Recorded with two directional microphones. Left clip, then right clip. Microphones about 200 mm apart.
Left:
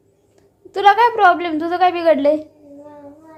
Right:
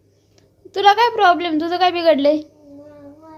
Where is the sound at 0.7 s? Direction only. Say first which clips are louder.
Left 1 dB; centre (ahead or behind).